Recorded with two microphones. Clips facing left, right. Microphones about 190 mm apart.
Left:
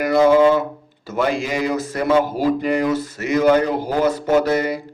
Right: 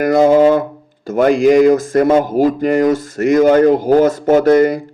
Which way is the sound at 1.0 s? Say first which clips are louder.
Right 10 dB; 50° right (ahead or behind).